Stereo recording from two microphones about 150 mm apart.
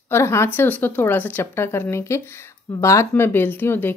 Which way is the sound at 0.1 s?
15° left (ahead or behind).